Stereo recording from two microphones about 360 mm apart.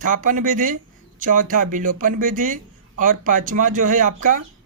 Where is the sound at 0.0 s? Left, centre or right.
Right.